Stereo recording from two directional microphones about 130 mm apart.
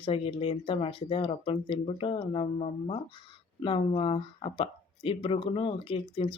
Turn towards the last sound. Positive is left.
turn(degrees=45)  # may be behind; listen again after turning